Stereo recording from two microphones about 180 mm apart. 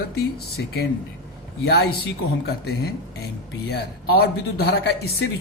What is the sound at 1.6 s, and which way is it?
Speech, 65° left (ahead or behind).